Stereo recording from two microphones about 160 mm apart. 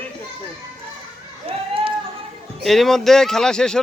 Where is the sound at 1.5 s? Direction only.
35° right (ahead or behind).